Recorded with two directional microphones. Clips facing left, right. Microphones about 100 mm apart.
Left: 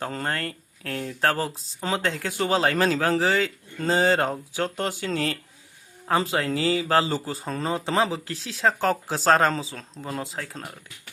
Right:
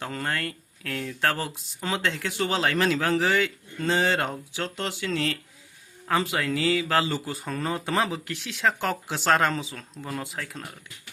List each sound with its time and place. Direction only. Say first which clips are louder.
0.0 s speech: left 1 dB; 35° left (ahead or behind)